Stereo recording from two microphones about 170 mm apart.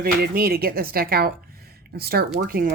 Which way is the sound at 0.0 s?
60° right (ahead or behind).